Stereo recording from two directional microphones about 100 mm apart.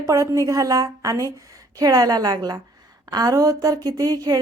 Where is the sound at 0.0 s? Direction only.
30° right (ahead or behind).